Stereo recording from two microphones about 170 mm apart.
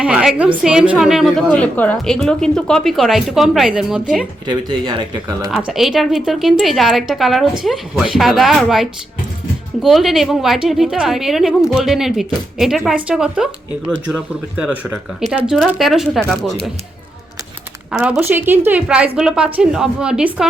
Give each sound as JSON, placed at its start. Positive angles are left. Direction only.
{"t": 0.0, "sound": "speech", "side_deg": -5}
{"t": 1.5, "sound": "speech", "side_deg": 10}
{"t": 4.4, "sound": "speech", "side_deg": -25}
{"t": 5.5, "sound": "speech", "side_deg": -5}
{"t": 17.9, "sound": "a woman's voice", "side_deg": -5}